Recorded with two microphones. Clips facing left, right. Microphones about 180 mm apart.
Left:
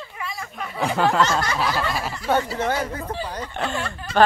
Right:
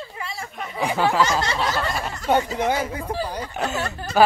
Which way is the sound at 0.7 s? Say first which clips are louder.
Even; centre (ahead or behind).